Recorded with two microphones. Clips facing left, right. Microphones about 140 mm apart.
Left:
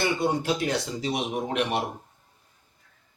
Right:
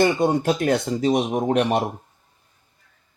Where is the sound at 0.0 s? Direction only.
50° right (ahead or behind).